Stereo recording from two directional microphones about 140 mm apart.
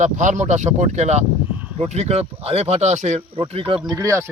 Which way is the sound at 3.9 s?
20° right (ahead or behind).